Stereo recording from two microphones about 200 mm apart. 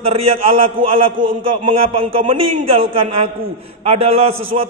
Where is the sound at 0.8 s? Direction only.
25° right (ahead or behind).